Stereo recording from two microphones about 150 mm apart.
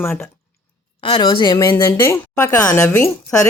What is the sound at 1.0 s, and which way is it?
A woman's voice, 35° left (ahead or behind).